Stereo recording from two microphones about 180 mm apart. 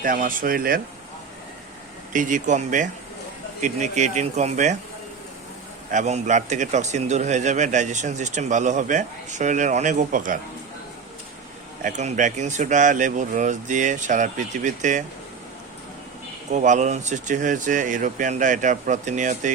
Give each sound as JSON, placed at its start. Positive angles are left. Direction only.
{"t": 0.0, "sound": "speech", "side_deg": -50}
{"t": 2.1, "sound": "speech", "side_deg": -45}
{"t": 5.9, "sound": "speech", "side_deg": -45}
{"t": 11.8, "sound": "speech", "side_deg": -45}
{"t": 16.5, "sound": "speech", "side_deg": -40}